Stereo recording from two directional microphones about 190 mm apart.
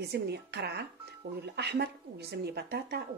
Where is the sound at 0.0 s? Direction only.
60° right (ahead or behind).